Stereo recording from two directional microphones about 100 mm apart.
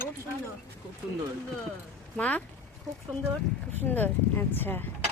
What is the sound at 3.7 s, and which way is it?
Speech, 20° left (ahead or behind).